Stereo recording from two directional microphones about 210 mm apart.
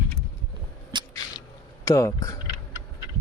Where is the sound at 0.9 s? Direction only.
20° right (ahead or behind).